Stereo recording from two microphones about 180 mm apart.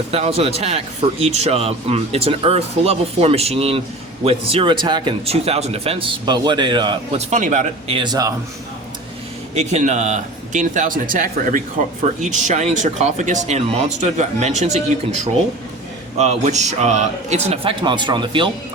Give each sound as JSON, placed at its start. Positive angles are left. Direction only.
{"t": 0.1, "sound": "speech", "side_deg": -35}
{"t": 7.2, "sound": "speech", "side_deg": -40}
{"t": 7.9, "sound": "a man's voice", "side_deg": -25}
{"t": 9.6, "sound": "speech", "side_deg": -40}
{"t": 16.1, "sound": "speech", "side_deg": -40}